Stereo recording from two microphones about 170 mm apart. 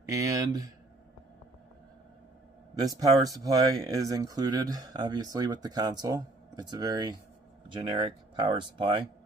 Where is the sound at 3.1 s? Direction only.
20° right (ahead or behind).